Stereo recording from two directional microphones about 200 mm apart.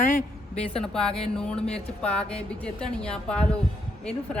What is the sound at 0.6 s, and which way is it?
Speech, 5° left (ahead or behind).